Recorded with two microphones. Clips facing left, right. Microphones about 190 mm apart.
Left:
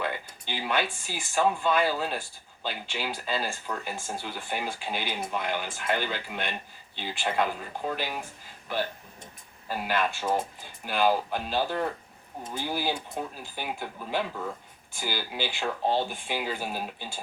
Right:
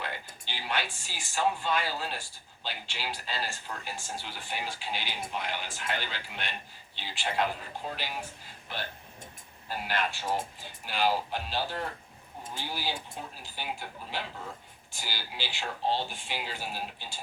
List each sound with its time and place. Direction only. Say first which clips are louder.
0.0 s speech: left 6 dB; 50° left (ahead or behind)
9.6 s speech: left 4 dB; 50° left (ahead or behind)